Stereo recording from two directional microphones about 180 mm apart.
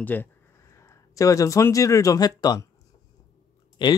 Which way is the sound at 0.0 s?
10° left (ahead or behind).